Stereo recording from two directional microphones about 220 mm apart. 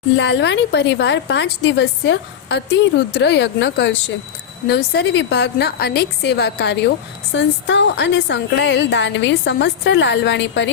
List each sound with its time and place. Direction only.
0.2 s a woman's voice: 55° left (ahead or behind)